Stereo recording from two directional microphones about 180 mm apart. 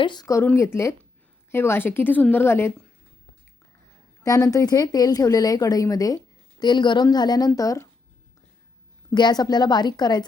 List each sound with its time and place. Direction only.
0.0 s a woman's voice: 25° left (ahead or behind)
4.2 s speech: 20° left (ahead or behind)
9.0 s speech: 25° left (ahead or behind)